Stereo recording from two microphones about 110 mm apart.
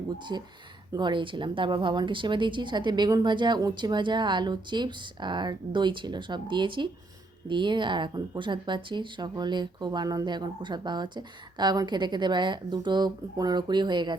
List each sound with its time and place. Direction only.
0.3 s speech: 40° right (ahead or behind)